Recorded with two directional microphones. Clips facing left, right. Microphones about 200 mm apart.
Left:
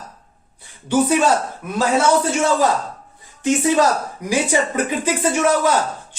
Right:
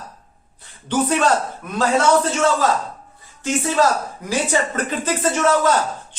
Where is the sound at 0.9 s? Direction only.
10° left (ahead or behind).